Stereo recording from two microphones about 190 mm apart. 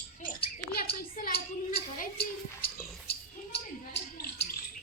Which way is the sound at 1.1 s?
50° left (ahead or behind).